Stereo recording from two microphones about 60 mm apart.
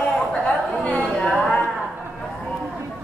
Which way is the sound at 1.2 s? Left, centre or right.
Centre.